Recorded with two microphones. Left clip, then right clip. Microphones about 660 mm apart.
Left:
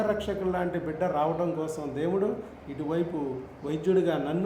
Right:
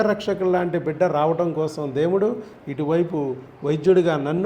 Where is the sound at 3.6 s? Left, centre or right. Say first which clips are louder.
Right 8 dB; right.